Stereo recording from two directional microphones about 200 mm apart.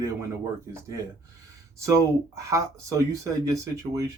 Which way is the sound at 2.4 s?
15° right (ahead or behind).